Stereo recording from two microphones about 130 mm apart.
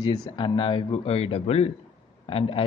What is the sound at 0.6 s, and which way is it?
A man's voice, 40° left (ahead or behind).